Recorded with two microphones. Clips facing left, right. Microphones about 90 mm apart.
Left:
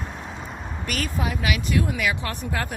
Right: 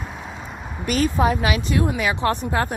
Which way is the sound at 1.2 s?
35° right (ahead or behind).